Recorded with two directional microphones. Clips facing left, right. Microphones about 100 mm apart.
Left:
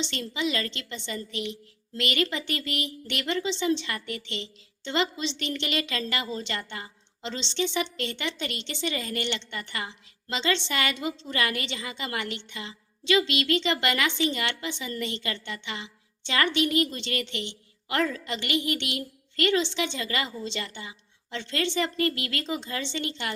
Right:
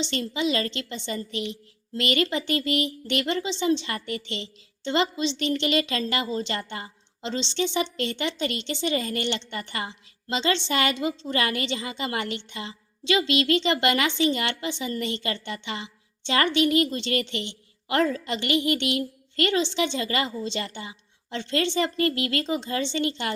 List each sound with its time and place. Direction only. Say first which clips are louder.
0.0 s a woman's voice: right 3 dB; 25° right (ahead or behind)